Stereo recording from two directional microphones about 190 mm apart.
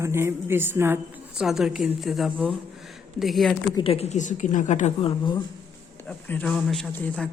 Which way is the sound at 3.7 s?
30° left (ahead or behind).